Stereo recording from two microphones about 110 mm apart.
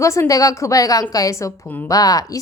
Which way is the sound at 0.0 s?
25° left (ahead or behind).